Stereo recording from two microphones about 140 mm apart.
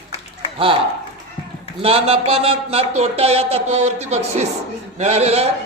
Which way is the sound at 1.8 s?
45° right (ahead or behind).